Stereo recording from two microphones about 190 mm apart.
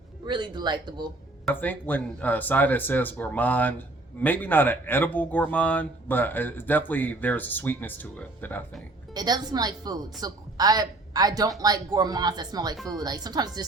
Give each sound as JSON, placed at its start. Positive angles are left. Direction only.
{"t": 0.3, "sound": "a woman's voice", "side_deg": -25}
{"t": 1.5, "sound": "speech", "side_deg": 10}
{"t": 9.1, "sound": "a woman's voice", "side_deg": -20}
{"t": 12.7, "sound": "speech", "side_deg": 0}
{"t": 13.0, "sound": "a woman's voice", "side_deg": -20}